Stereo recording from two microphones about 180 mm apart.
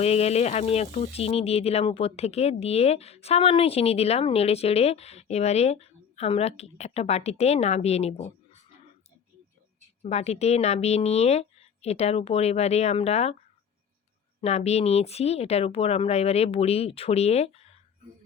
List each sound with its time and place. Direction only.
0.0 s speech: 35° left (ahead or behind)
10.0 s speech: 35° left (ahead or behind)
14.4 s speech: 35° left (ahead or behind)